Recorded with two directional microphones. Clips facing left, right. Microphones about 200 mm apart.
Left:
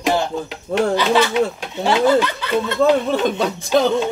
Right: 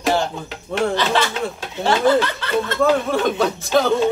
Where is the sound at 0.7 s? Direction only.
15° left (ahead or behind).